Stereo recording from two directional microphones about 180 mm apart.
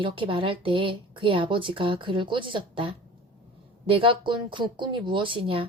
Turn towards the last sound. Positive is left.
turn(degrees=-30)  # may be behind; listen again after turning